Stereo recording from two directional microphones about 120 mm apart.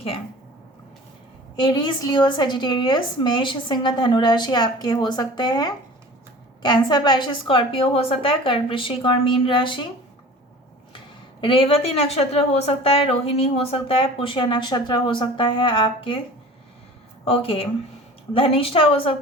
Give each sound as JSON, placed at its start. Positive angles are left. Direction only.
{"t": 1.5, "sound": "a woman's voice", "side_deg": 40}
{"t": 10.9, "sound": "speech", "side_deg": 45}
{"t": 17.2, "sound": "speech", "side_deg": 55}